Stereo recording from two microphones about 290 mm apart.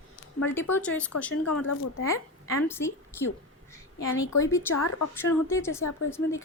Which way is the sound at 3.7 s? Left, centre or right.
Centre.